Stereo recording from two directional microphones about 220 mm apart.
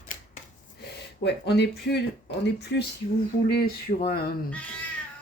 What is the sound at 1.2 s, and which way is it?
Speech, 50° left (ahead or behind).